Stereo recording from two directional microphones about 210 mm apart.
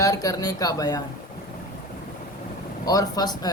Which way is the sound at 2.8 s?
15° left (ahead or behind).